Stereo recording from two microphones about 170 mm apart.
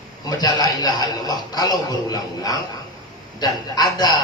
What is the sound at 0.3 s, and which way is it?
A man's voice, 20° left (ahead or behind).